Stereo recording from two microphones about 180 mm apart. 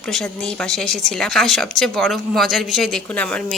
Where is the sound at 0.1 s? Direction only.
5° left (ahead or behind).